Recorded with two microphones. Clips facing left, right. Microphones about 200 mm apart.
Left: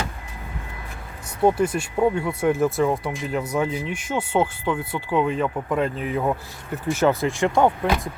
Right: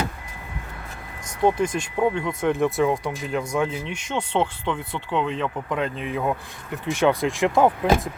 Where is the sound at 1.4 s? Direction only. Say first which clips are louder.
Left 2 dB; 10° left (ahead or behind).